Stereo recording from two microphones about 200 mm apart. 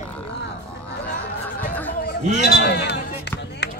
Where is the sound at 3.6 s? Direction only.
60° left (ahead or behind).